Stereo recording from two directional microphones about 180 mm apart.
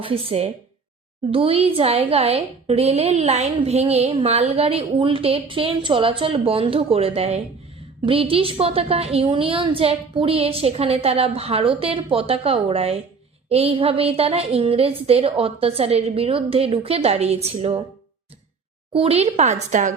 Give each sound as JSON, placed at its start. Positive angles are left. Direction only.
{"t": 0.0, "sound": "a woman's voice", "side_deg": -30}
{"t": 18.9, "sound": "a woman's voice", "side_deg": -35}